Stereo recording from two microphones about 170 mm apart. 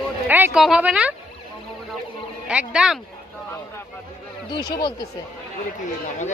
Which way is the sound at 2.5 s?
5° right (ahead or behind).